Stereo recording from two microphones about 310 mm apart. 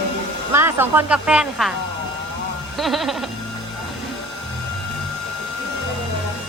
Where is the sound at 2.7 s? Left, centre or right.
Centre.